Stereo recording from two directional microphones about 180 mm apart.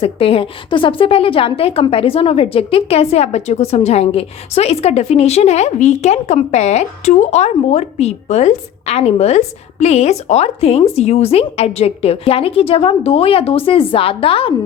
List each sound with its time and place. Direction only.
0.0 s a woman's voice: 30° left (ahead or behind)